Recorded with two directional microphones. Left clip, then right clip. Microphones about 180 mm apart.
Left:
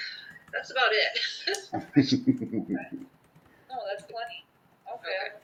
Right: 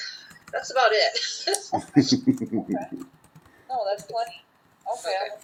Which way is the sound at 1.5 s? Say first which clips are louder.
Right 5 dB; 50° right (ahead or behind).